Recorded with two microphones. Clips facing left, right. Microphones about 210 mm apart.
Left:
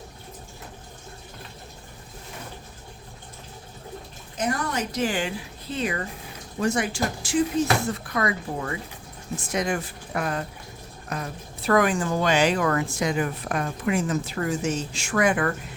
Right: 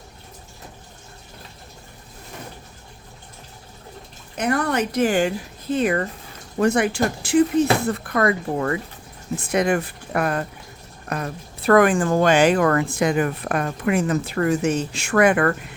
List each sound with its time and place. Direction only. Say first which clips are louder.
4.4 s speech: right 5 dB; 60° right (ahead or behind)